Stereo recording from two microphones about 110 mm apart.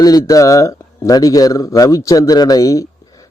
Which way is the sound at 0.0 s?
35° left (ahead or behind).